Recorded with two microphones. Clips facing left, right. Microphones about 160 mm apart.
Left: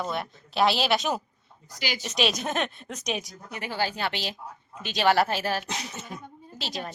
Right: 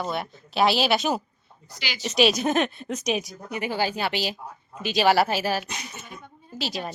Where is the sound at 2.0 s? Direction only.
5° right (ahead or behind).